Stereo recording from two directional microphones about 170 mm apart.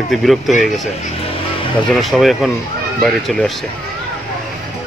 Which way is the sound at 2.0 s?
Centre (ahead or behind).